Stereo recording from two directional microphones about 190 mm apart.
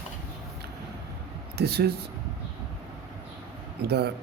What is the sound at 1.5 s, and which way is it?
Speech, 60° right (ahead or behind).